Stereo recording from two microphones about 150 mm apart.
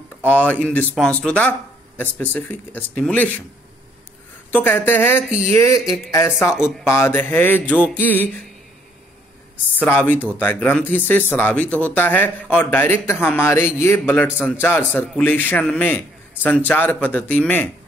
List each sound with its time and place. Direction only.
0.3 s speech: 10° left (ahead or behind)
4.5 s speech: 10° left (ahead or behind)
5.9 s speech: centre (ahead or behind)
6.8 s speech: 15° left (ahead or behind)
9.8 s speech: 15° left (ahead or behind)